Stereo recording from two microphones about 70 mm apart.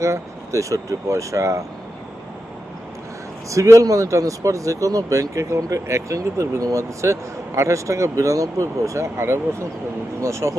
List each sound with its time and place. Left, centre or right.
0.0 s speech: right
3.5 s speech: right